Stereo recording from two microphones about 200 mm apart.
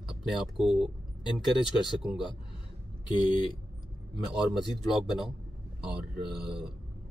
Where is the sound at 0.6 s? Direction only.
Centre (ahead or behind).